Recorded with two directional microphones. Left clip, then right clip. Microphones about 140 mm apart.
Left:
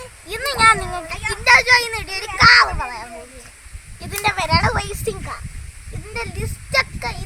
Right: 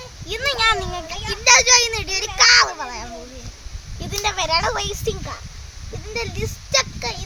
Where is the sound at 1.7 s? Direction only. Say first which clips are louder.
Left 1 dB; 90° right.